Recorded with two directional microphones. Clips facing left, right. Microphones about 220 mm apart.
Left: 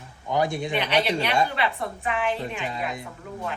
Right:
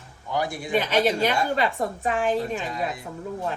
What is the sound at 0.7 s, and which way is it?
A woman's voice, 45° right (ahead or behind).